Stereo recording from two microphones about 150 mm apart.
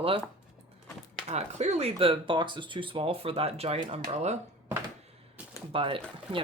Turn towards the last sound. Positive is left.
turn(degrees=-35)  # may be behind; listen again after turning